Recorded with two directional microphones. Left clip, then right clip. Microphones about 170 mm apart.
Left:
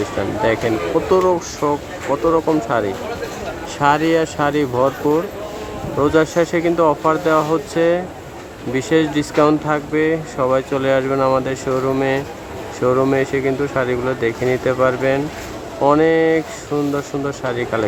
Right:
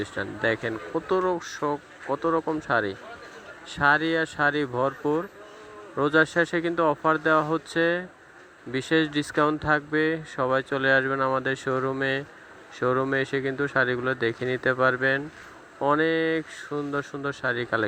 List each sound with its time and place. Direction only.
1.2 s speech: 30° right (ahead or behind)